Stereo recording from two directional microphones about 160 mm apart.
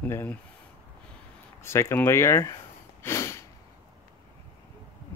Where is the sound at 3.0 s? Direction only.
15° left (ahead or behind).